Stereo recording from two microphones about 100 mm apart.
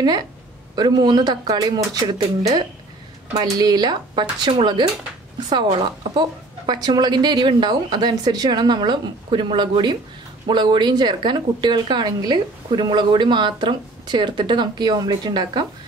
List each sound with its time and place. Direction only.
0.0 s speech: 40° right (ahead or behind)